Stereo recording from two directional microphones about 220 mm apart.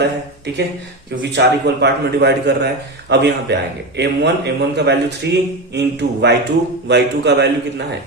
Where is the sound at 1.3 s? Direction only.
50° right (ahead or behind).